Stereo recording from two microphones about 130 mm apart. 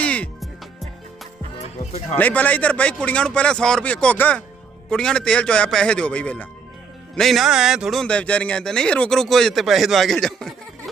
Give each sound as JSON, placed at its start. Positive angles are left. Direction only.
{"t": 0.0, "sound": "music", "side_deg": 10}
{"t": 1.8, "sound": "speech", "side_deg": 60}
{"t": 2.1, "sound": "speech", "side_deg": 10}
{"t": 7.2, "sound": "speech", "side_deg": 0}
{"t": 8.0, "sound": "speech", "side_deg": 10}